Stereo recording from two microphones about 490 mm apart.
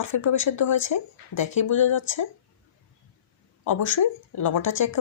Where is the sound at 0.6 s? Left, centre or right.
Left.